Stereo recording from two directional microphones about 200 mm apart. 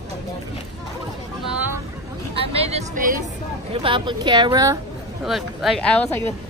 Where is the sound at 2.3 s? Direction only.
30° right (ahead or behind).